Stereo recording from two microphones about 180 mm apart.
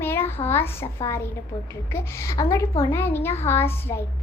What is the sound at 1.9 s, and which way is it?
A child's voice, 15° left (ahead or behind).